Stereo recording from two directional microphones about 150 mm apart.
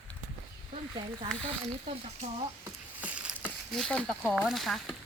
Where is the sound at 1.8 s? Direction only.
45° right (ahead or behind).